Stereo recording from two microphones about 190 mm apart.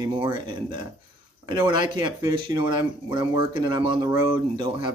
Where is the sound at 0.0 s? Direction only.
25° right (ahead or behind).